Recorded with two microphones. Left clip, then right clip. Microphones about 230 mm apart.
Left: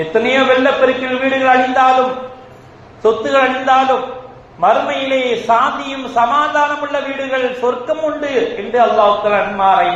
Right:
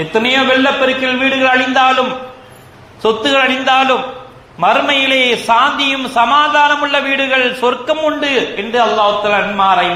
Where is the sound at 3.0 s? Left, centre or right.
Right.